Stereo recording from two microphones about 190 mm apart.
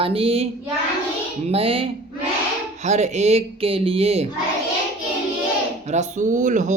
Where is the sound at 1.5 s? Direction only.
30° right (ahead or behind).